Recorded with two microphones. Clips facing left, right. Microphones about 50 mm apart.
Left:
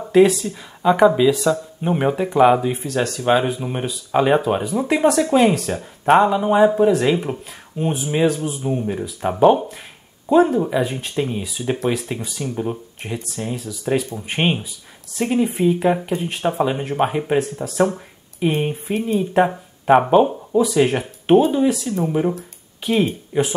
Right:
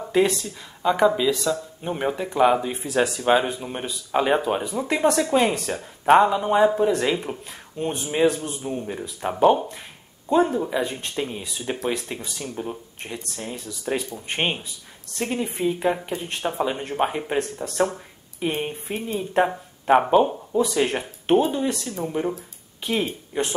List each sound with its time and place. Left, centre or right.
0.0 s speech: centre
2.9 s speech: centre
3.3 s speech: centre
23.3 s speech: centre